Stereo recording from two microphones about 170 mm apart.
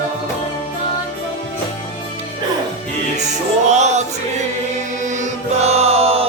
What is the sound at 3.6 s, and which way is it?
Music, 40° right (ahead or behind).